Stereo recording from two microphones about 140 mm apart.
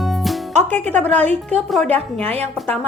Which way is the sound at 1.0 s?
55° right (ahead or behind).